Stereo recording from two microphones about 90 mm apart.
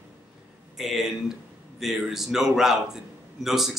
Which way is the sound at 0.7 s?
5° right (ahead or behind).